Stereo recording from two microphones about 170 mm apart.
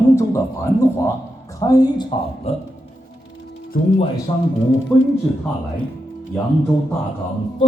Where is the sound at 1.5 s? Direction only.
20° left (ahead or behind).